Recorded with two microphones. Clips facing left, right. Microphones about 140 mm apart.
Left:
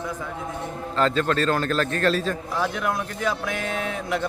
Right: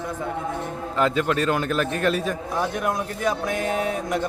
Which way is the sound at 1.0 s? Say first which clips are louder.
Even; 10° right (ahead or behind).